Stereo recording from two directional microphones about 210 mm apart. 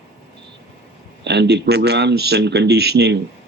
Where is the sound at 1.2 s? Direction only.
55° right (ahead or behind).